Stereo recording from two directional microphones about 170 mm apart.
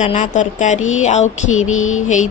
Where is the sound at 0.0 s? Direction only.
45° left (ahead or behind).